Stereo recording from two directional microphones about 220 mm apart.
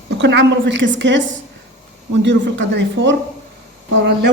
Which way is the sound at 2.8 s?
55° right (ahead or behind).